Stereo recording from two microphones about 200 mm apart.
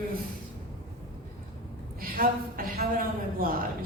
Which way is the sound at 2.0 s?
45° right (ahead or behind).